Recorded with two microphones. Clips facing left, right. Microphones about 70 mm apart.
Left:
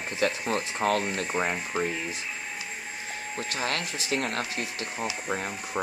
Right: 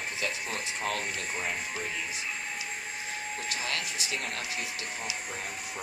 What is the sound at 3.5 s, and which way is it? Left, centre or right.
Speech, left.